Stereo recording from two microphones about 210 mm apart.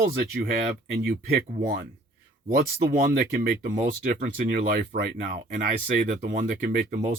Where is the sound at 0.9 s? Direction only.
45° right (ahead or behind).